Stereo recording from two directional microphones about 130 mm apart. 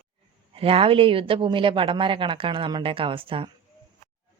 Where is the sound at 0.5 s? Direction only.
45° right (ahead or behind).